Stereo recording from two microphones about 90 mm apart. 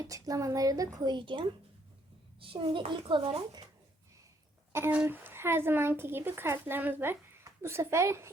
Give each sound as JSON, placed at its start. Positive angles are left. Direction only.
{"t": 0.0, "sound": "speech", "side_deg": -40}
{"t": 1.1, "sound": "a child's voice", "side_deg": -65}
{"t": 5.0, "sound": "speech", "side_deg": -25}